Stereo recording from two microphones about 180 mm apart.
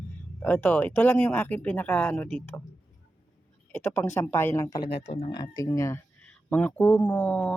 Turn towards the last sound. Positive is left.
turn(degrees=5)  # may be behind; listen again after turning